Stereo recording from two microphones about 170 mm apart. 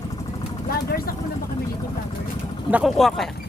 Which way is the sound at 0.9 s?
60° left (ahead or behind).